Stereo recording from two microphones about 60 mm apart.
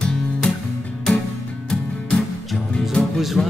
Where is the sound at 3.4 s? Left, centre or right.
Centre.